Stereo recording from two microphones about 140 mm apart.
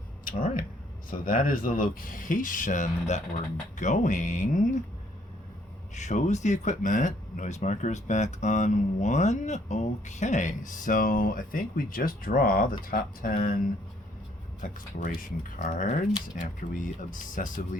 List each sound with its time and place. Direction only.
0.3 s speech: 85° left; by 4.8 s 60° left (ahead or behind)
5.9 s speech: 60° left (ahead or behind); by 12.6 s 90° left
12.9 s speech: 75° left (ahead or behind)
14.6 s speech: 80° left